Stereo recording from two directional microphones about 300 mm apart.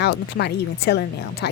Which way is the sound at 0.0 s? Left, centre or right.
Left.